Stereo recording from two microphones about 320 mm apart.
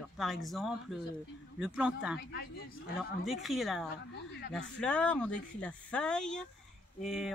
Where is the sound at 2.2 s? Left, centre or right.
Left.